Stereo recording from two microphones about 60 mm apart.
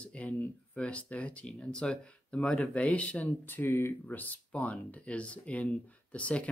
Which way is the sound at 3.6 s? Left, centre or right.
Left.